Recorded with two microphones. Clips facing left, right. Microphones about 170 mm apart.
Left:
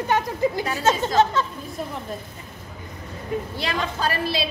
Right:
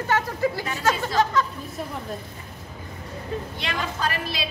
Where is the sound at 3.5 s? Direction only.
35° left (ahead or behind).